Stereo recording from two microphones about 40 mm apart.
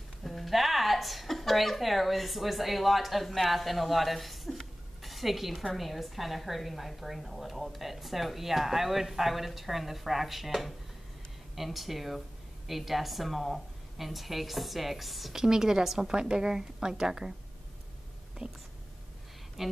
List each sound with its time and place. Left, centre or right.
0.2 s a woman's voice: centre
15.3 s a woman's voice: centre
18.4 s speech: right
19.6 s a woman's voice: centre